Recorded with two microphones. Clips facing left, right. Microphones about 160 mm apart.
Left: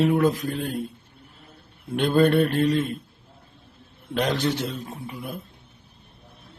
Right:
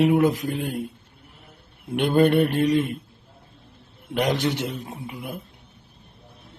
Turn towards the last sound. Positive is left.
turn(degrees=-20)  # may be behind; listen again after turning